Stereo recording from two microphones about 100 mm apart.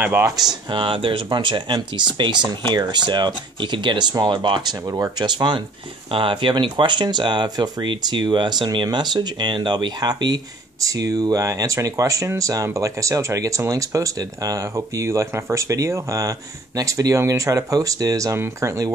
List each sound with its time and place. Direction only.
0.0 s speech: 20° right (ahead or behind)
0.7 s speech: 60° right (ahead or behind)
4.8 s speech: 35° right (ahead or behind)
5.2 s speech: 45° right (ahead or behind)
6.1 s speech: 60° right (ahead or behind); by 18.9 s 30° right (ahead or behind)